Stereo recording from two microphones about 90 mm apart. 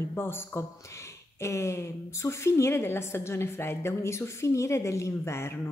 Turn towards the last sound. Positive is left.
turn(degrees=30)  # may be behind; listen again after turning